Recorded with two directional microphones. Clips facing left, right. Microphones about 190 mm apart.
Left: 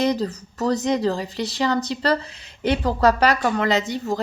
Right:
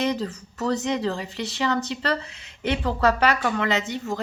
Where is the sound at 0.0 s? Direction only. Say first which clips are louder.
Left 4 dB; 40° left (ahead or behind).